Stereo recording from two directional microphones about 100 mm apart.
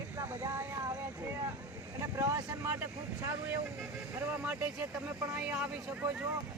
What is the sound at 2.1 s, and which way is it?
Speech, 30° right (ahead or behind).